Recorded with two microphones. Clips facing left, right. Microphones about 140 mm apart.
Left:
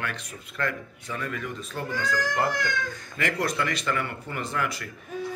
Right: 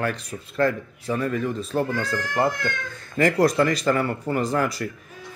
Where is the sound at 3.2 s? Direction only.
35° right (ahead or behind).